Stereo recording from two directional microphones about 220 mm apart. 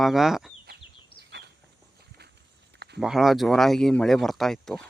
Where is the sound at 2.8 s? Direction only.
50° right (ahead or behind).